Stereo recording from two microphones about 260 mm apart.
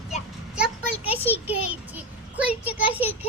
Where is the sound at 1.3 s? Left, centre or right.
Centre.